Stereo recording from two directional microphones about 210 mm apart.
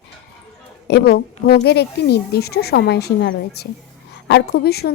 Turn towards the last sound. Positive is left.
turn(degrees=50)  # may be behind; listen again after turning